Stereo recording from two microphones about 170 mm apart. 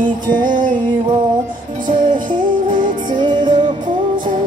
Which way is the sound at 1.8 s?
50° right (ahead or behind).